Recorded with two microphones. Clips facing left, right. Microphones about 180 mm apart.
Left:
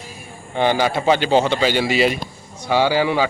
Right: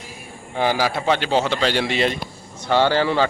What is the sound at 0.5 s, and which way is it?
A man's voice, centre (ahead or behind).